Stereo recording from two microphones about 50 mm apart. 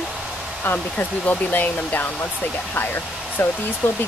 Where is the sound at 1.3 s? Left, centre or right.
Left.